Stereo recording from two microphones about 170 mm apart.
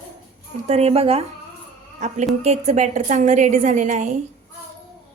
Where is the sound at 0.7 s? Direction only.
35° right (ahead or behind).